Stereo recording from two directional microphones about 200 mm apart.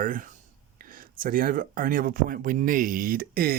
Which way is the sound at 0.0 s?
40° right (ahead or behind).